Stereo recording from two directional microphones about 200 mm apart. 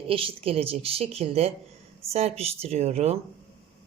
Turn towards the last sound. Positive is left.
turn(degrees=-30)  # may be behind; listen again after turning